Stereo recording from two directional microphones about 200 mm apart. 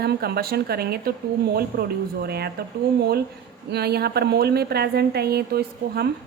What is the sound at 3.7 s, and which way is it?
A woman's voice, 55° right (ahead or behind).